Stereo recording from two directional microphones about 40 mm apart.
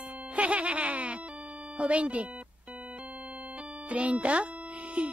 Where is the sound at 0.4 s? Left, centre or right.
Right.